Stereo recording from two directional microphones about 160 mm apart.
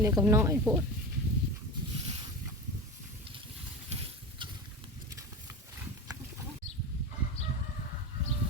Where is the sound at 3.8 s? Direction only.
40° right (ahead or behind).